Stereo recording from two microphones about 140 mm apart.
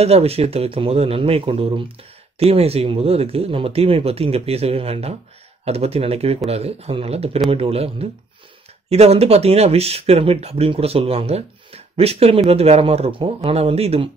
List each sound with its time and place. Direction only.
0.0 s speech: 45° right (ahead or behind)